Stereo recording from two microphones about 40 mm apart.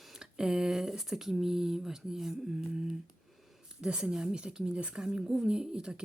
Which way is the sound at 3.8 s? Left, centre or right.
Right.